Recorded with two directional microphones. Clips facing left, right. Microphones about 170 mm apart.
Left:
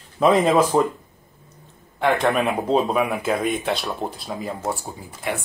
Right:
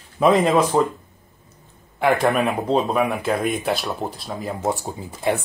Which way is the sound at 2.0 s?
Centre (ahead or behind).